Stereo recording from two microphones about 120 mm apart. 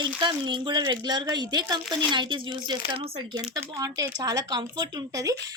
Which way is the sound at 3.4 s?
30° right (ahead or behind).